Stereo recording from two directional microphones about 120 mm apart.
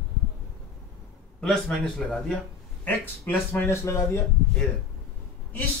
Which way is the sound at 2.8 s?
15° left (ahead or behind).